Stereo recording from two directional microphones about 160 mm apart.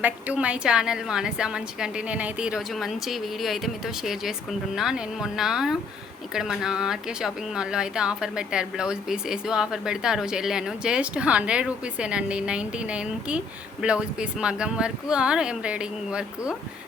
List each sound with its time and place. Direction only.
0.0 s speech: 10° right (ahead or behind)